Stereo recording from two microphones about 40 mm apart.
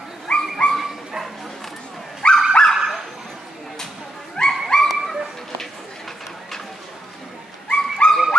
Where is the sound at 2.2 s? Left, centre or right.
Left.